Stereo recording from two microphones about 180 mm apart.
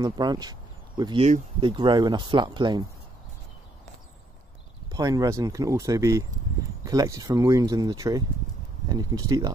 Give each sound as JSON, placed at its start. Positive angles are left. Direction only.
{"t": 0.0, "sound": "speech", "side_deg": -25}
{"t": 4.9, "sound": "speech", "side_deg": -20}